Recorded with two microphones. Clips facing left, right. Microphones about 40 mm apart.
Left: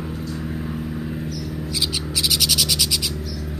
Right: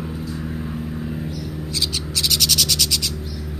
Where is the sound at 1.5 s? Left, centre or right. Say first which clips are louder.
Left 1 dB; centre.